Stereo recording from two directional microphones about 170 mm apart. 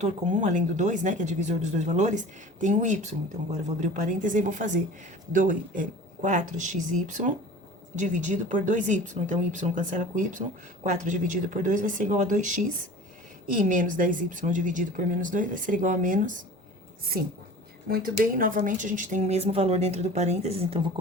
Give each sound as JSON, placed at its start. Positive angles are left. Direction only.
{"t": 0.0, "sound": "speech", "side_deg": -45}
{"t": 17.8, "sound": "speech", "side_deg": -60}